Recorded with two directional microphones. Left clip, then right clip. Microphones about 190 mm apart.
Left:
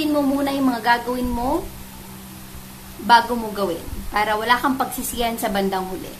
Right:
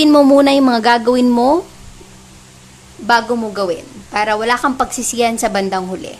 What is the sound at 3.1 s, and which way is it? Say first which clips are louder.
A woman's voice: right 1 dB; 30° right (ahead or behind).